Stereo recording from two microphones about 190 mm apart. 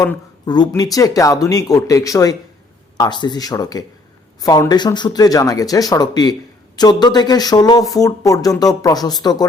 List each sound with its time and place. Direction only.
0.0 s speech: 20° left (ahead or behind)